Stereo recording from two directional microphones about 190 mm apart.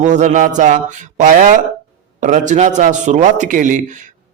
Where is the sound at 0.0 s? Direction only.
40° right (ahead or behind).